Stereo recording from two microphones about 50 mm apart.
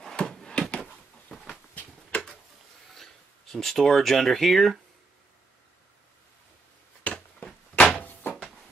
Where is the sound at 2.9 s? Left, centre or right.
Centre.